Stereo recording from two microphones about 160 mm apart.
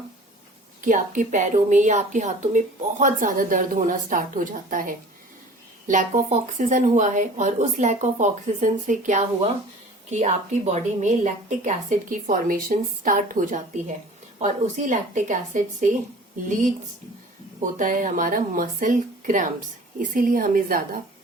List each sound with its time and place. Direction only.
0.9 s a woman's voice: 50° right (ahead or behind)
17.6 s speech: 55° right (ahead or behind)